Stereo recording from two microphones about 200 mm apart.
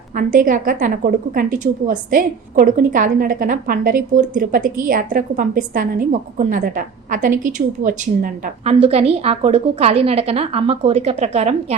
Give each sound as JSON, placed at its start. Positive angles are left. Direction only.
{"t": 0.1, "sound": "a woman's voice", "side_deg": -40}